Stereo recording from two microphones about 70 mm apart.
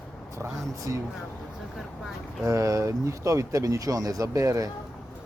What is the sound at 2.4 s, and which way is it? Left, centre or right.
Speech, right.